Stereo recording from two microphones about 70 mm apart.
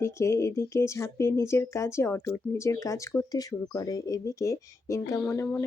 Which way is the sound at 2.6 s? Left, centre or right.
Left.